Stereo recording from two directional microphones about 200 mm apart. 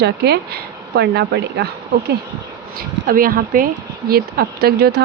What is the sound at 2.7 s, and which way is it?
Speech, 45° right (ahead or behind).